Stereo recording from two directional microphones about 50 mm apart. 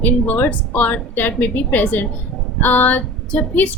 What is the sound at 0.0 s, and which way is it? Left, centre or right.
Speech, left.